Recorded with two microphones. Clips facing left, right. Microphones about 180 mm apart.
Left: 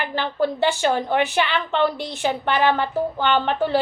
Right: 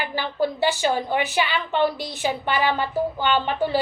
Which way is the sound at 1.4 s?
10° right (ahead or behind).